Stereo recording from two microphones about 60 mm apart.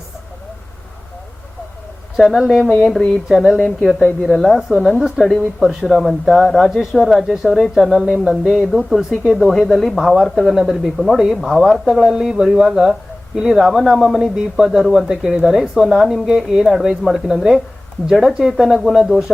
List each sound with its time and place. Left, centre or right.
2.2 s a woman's voice: centre